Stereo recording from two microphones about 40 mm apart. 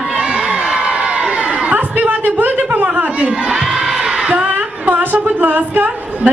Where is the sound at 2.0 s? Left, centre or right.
Right.